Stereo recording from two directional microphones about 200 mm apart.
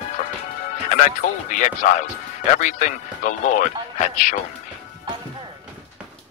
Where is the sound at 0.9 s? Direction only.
40° left (ahead or behind).